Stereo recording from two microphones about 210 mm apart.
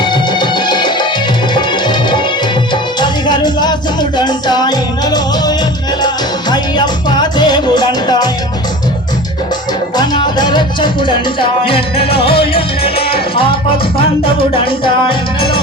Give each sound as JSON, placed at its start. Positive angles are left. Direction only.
{"t": 0.0, "sound": "music", "side_deg": 20}
{"t": 6.5, "sound": "music", "side_deg": 20}
{"t": 10.0, "sound": "music", "side_deg": 20}
{"t": 14.5, "sound": "music", "side_deg": 25}